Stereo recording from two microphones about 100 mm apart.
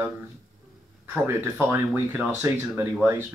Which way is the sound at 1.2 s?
25° right (ahead or behind).